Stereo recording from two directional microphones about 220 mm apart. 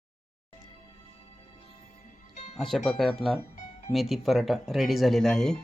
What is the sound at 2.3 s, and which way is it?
Music, 30° left (ahead or behind).